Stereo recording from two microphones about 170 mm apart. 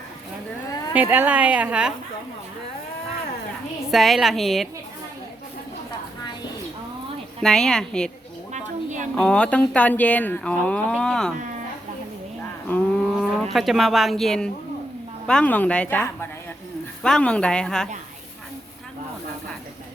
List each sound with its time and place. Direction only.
0.9 s a woman's voice: 10° right (ahead or behind)
3.9 s a woman's voice: centre (ahead or behind)
7.4 s a woman's voice: 5° left (ahead or behind)
8.5 s a sound: 45° right (ahead or behind)
9.1 s speech: 5° left (ahead or behind)
12.6 s a woman's voice: 5° left (ahead or behind)